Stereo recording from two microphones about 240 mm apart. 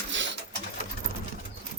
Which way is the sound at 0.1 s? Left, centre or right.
Right.